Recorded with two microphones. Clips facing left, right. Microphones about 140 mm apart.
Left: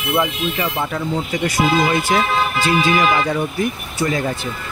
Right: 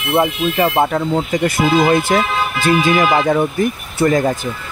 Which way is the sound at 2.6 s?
50° right (ahead or behind).